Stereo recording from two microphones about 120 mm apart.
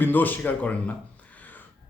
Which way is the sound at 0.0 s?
15° left (ahead or behind).